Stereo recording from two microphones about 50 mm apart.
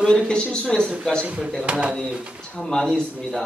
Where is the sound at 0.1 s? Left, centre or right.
Centre.